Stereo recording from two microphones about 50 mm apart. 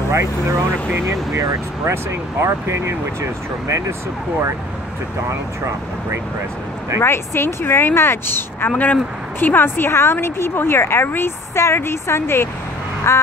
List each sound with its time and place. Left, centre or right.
0.1 s speech: right
2.4 s speech: right
7.0 s a woman's voice: left
8.6 s a woman's voice: left
13.0 s a sound: left